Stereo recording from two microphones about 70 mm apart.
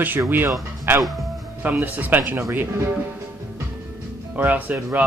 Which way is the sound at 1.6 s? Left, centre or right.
Right.